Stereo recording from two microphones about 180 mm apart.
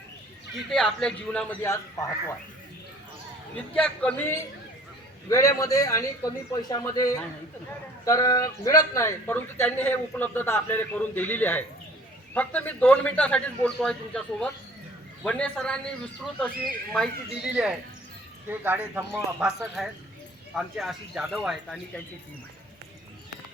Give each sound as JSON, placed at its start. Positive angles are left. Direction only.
{"t": 0.5, "sound": "a man's voice", "side_deg": 0}
{"t": 3.5, "sound": "a man's voice", "side_deg": 5}
{"t": 16.9, "sound": "a man's voice", "side_deg": 0}